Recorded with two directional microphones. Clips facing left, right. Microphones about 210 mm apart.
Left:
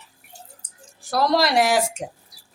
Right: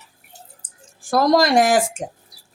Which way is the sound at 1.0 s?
50° right (ahead or behind).